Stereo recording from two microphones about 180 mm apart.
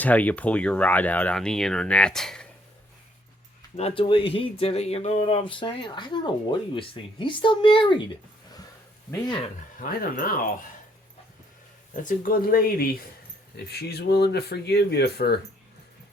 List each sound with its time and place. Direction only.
0.0 s speech: 10° left (ahead or behind)
3.8 s speech: 30° left (ahead or behind)
9.8 s speech: 50° left (ahead or behind)
12.0 s speech: 50° left (ahead or behind)